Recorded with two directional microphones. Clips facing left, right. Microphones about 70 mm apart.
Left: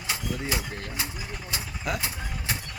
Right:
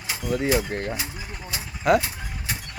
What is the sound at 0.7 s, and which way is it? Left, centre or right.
Speech, right.